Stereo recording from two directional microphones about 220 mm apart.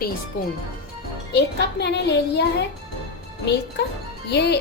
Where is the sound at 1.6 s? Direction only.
50° left (ahead or behind).